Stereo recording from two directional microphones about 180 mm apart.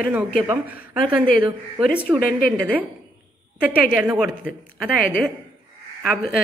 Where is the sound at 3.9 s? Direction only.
5° right (ahead or behind).